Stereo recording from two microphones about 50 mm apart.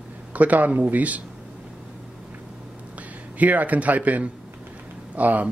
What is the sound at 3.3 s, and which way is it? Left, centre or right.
A man's voice, right.